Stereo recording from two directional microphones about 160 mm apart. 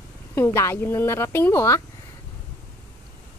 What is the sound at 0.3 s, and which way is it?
Speech, 15° left (ahead or behind).